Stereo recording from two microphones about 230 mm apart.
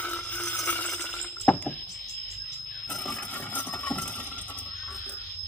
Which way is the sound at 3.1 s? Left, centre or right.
Centre.